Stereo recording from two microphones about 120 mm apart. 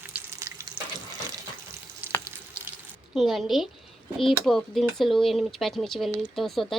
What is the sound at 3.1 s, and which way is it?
Speech, centre (ahead or behind).